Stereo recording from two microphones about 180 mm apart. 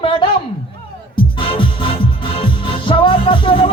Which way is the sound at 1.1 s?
30° left (ahead or behind).